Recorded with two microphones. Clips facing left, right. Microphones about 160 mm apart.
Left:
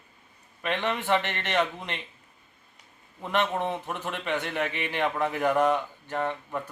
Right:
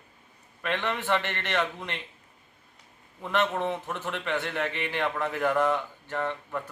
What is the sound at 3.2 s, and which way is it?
A man's voice, 15° left (ahead or behind).